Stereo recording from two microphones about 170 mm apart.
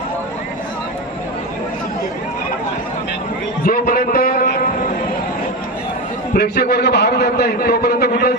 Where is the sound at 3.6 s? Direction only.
60° left (ahead or behind).